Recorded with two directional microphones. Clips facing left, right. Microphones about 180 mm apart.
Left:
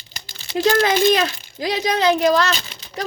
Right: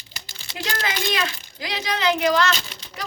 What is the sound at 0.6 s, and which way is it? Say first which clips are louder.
Speech: left 12 dB; 40° left (ahead or behind).